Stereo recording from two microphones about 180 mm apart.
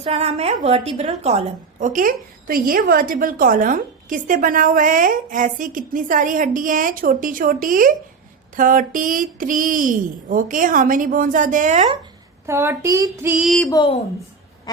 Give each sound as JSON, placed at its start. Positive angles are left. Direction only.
{"t": 0.0, "sound": "a woman's voice", "side_deg": -35}
{"t": 12.5, "sound": "female singing", "side_deg": -15}